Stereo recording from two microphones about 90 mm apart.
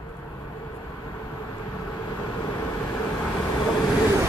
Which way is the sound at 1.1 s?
40° left (ahead or behind).